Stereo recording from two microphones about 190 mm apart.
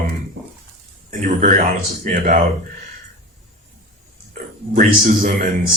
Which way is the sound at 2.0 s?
40° right (ahead or behind).